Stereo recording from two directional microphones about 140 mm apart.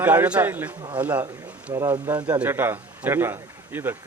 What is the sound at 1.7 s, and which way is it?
Speech, 25° right (ahead or behind).